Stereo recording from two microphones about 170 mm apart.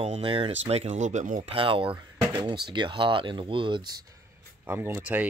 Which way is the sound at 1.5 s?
30° right (ahead or behind).